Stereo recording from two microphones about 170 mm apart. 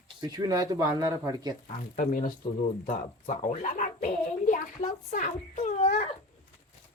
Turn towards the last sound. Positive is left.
turn(degrees=40)  # may be behind; listen again after turning